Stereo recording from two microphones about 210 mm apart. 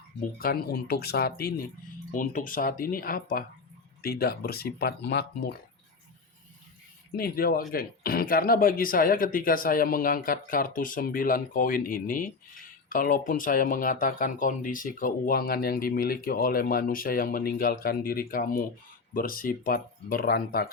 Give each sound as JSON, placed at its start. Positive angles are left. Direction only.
{"t": 0.3, "sound": "speech", "side_deg": 45}
{"t": 7.2, "sound": "speech", "side_deg": 45}